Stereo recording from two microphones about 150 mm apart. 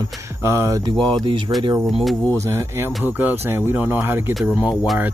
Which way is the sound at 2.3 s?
20° right (ahead or behind).